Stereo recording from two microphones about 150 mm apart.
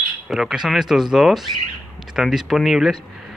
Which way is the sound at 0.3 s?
5° right (ahead or behind).